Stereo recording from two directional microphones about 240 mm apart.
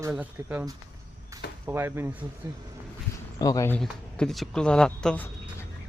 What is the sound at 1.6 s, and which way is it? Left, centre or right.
Speech, centre.